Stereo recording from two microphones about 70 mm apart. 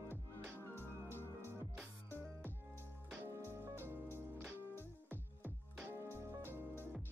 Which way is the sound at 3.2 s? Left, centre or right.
Right.